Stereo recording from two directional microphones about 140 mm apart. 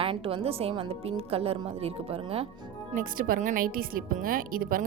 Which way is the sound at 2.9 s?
80° right.